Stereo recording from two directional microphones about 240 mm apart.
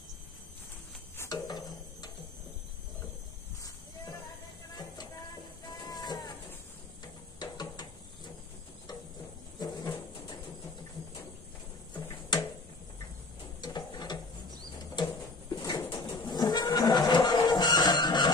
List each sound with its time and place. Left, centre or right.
1.1 s a sound: centre
5.7 s cat: centre
7.3 s music: centre
9.6 s music: centre
11.9 s a sound: centre
13.6 s ratchet: centre
15.5 s bird: centre
16.1 s music: centre